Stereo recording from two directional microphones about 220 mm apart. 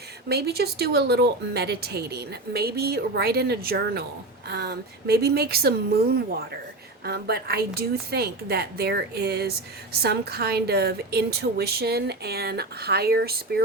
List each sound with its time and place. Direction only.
0.3 s speech: 45° right (ahead or behind)